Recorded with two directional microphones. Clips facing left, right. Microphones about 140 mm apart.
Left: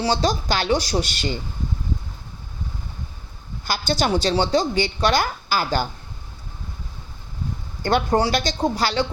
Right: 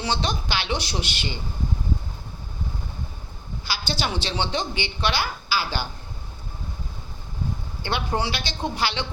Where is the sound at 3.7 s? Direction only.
45° left (ahead or behind).